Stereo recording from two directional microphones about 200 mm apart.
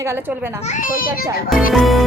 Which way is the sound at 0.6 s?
40° left (ahead or behind).